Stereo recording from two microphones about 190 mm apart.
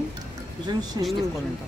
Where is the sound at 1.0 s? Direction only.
20° right (ahead or behind).